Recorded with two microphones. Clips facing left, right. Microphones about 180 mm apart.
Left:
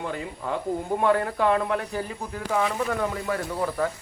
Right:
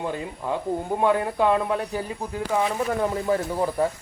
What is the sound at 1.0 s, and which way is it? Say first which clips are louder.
Speech: right 1 dB; 20° right (ahead or behind).